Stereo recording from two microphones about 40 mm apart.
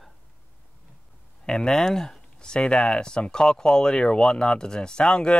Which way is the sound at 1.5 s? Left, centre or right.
Centre.